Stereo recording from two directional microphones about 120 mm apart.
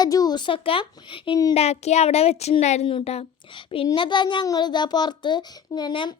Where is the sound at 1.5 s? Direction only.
65° left (ahead or behind).